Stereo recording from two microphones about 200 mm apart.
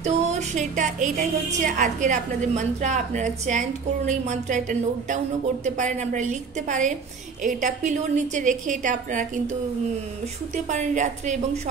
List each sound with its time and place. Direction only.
0.0 s a woman's voice: 35° right (ahead or behind)